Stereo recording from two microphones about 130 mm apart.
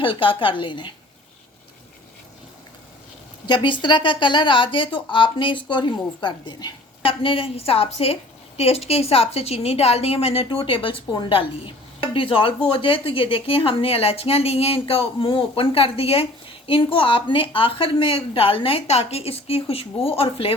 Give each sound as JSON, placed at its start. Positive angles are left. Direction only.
{"t": 0.0, "sound": "a woman's voice", "side_deg": 40}
{"t": 3.4, "sound": "a woman's voice", "side_deg": 35}